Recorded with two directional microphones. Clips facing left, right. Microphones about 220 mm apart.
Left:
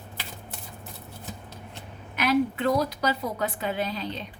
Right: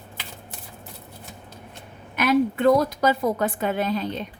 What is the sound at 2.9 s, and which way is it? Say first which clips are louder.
A woman's voice: right 6 dB; 50° right (ahead or behind).